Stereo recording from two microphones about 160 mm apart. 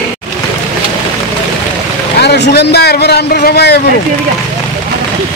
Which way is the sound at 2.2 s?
90° left.